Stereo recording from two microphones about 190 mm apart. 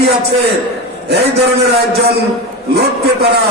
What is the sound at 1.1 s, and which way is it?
A man's voice, 60° right (ahead or behind).